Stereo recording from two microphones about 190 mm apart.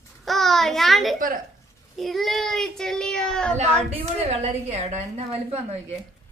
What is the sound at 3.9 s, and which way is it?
A woman's voice, 30° right (ahead or behind).